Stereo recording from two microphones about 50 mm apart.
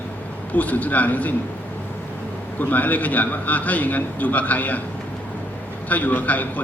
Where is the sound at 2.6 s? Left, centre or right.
Left.